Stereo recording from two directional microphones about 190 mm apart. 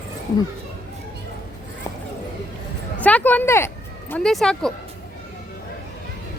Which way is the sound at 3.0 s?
10° left (ahead or behind).